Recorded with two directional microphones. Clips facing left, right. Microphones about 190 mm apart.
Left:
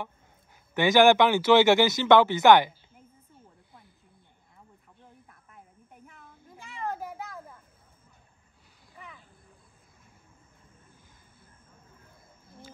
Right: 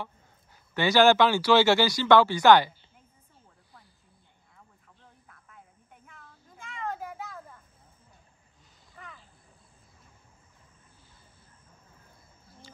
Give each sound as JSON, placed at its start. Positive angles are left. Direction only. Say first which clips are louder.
{"t": 0.7, "sound": "speech", "louder": "left 1 dB", "side_deg": 15}